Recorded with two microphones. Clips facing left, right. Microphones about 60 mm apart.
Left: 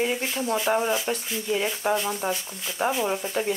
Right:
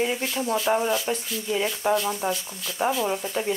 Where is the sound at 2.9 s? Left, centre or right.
Centre.